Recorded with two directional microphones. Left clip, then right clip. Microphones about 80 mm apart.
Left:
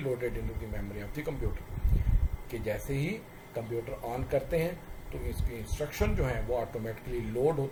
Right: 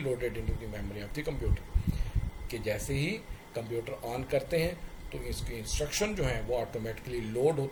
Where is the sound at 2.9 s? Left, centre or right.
Centre.